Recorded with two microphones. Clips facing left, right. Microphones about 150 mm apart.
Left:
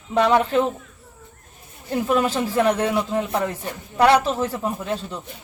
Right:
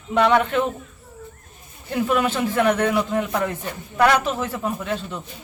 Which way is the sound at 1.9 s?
35° left (ahead or behind).